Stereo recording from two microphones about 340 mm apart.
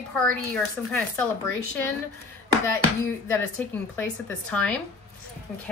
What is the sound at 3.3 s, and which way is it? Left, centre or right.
A woman's voice, centre.